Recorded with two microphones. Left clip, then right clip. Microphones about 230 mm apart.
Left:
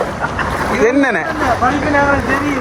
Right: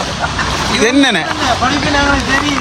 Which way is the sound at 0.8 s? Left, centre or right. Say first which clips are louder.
Right 2 dB; right.